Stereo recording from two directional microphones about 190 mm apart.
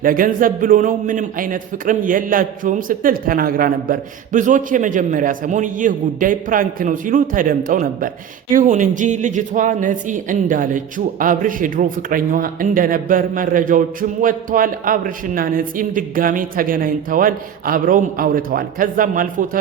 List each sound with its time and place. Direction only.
0.0 s a man's voice: 45° right (ahead or behind)